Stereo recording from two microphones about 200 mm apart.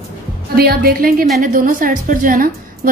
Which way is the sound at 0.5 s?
50° right (ahead or behind).